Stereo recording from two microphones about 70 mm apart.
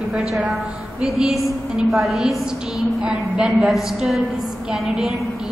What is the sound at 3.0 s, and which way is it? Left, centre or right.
Speech, centre.